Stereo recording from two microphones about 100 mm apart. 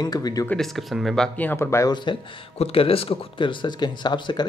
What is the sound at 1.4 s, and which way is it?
Speech, 25° left (ahead or behind).